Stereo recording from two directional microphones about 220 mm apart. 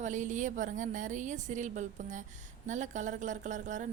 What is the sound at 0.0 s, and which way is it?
A woman's voice, 35° right (ahead or behind).